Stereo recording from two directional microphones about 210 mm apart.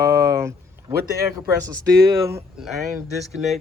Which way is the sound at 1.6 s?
15° right (ahead or behind).